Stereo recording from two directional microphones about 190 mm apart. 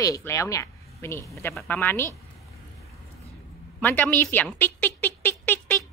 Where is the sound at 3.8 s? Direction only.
10° left (ahead or behind).